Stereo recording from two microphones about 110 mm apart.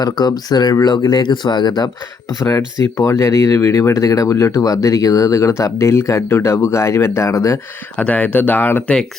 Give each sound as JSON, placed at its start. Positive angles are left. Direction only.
{"t": 0.0, "sound": "speech", "side_deg": 40}
{"t": 3.0, "sound": "speech", "side_deg": 30}
{"t": 7.9, "sound": "speech", "side_deg": 15}